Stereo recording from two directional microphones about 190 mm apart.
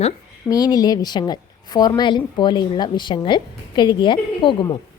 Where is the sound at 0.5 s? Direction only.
20° left (ahead or behind).